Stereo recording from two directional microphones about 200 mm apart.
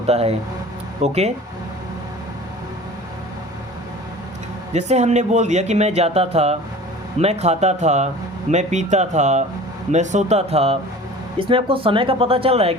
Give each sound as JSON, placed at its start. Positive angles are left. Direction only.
{"t": 0.1, "sound": "speech", "side_deg": -30}
{"t": 4.7, "sound": "speech", "side_deg": -35}